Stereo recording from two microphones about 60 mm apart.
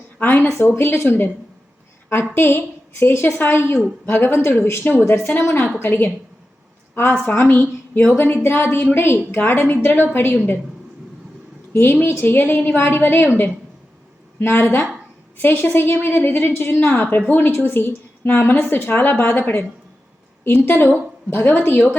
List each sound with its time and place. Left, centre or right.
0.2 s a woman's voice: left
2.3 s a woman's voice: left
5.0 s a woman's voice: left
11.7 s a woman's voice: left